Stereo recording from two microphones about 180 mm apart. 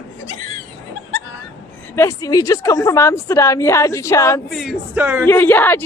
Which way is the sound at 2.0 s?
15° left (ahead or behind).